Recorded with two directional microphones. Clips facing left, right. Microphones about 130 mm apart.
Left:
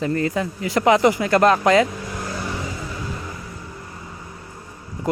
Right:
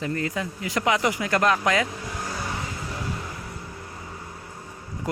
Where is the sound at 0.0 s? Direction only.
35° left (ahead or behind).